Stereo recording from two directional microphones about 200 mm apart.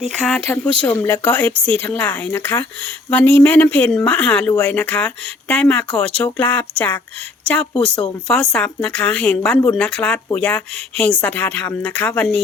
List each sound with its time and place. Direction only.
0.2 s a woman's voice: 5° left (ahead or behind)